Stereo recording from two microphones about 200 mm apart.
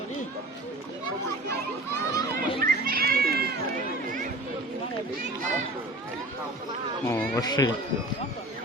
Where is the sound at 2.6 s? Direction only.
45° right (ahead or behind).